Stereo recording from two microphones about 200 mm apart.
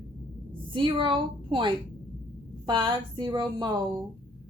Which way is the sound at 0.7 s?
25° right (ahead or behind).